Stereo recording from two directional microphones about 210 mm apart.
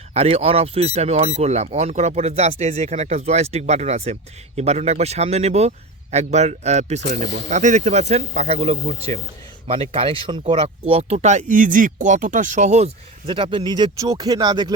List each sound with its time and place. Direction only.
0.1 s speech: 30° right (ahead or behind)